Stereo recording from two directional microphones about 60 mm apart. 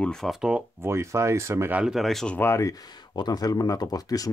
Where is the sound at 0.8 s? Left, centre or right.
Right.